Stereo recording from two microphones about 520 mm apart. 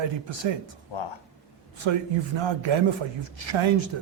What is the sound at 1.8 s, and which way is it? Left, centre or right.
Speech, right.